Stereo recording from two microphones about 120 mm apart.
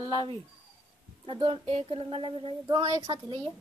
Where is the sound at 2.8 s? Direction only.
30° right (ahead or behind).